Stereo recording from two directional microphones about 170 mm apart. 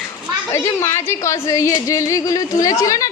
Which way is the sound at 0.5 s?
15° left (ahead or behind).